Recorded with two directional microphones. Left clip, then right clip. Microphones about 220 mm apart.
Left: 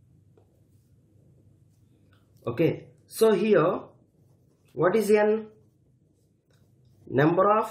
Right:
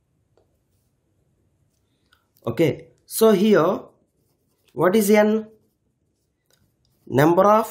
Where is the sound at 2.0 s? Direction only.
50° right (ahead or behind).